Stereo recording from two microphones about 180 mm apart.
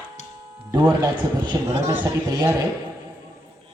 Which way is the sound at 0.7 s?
20° right (ahead or behind).